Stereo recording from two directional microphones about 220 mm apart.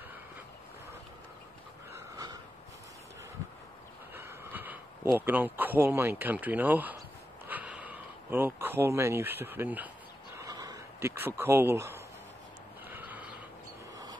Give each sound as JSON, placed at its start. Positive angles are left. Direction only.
{"t": 2.0, "sound": "snort", "side_deg": -15}
{"t": 4.1, "sound": "speech", "side_deg": -10}
{"t": 10.3, "sound": "a sound", "side_deg": -15}